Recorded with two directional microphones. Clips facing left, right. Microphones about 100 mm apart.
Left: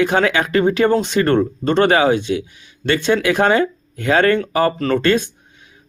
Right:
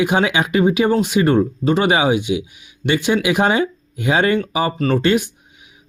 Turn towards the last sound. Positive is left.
turn(degrees=-15)  # may be behind; listen again after turning